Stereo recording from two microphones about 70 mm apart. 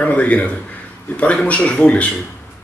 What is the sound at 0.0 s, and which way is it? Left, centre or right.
Speech, left.